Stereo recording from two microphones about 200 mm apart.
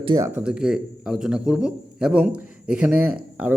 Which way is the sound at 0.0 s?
25° right (ahead or behind).